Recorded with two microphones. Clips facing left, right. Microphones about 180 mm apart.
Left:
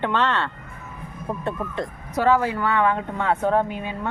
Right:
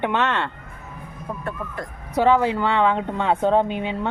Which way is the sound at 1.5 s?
25° left (ahead or behind).